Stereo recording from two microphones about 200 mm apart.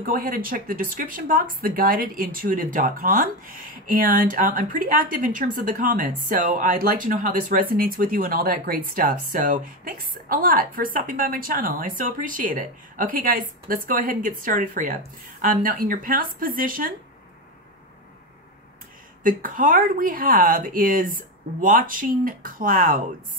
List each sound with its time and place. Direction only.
0.0 s speech: 45° right (ahead or behind)
19.2 s speech: 45° right (ahead or behind)